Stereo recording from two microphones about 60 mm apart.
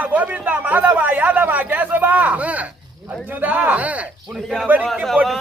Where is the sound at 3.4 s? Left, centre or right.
Right.